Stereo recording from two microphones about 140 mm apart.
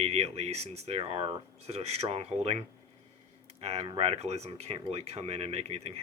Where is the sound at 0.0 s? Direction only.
50° right (ahead or behind).